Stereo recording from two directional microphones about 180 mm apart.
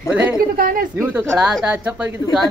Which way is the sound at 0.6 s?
50° right (ahead or behind).